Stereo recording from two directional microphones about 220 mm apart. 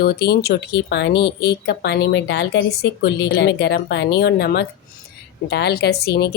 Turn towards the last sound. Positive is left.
turn(degrees=45)  # may be behind; listen again after turning